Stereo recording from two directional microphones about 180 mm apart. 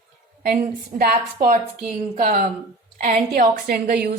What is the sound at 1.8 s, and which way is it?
A woman's voice, 45° right (ahead or behind).